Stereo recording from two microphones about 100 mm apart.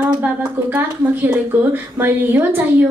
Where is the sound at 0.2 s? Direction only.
15° right (ahead or behind).